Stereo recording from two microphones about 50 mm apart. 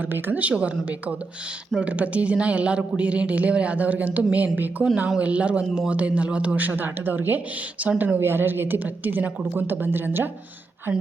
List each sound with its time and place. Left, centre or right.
0.0 s a man's voice: right
8.2 s a woman's voice: right